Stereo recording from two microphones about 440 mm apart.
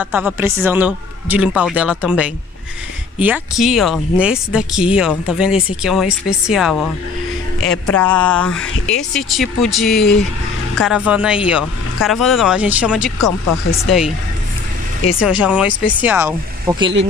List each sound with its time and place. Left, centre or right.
0.0 s speech: centre
13.5 s speech: left
15.1 s speech: centre